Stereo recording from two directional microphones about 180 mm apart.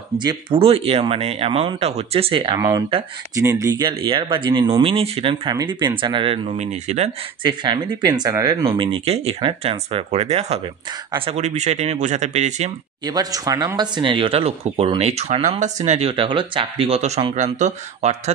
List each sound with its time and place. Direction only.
0.2 s speech: 25° right (ahead or behind)
3.3 s speech: 20° right (ahead or behind); by 7.1 s 40° right (ahead or behind)
7.4 s speech: 25° right (ahead or behind); by 12.7 s 40° right (ahead or behind)
13.0 s speech: 20° right (ahead or behind); by 18.3 s 40° right (ahead or behind)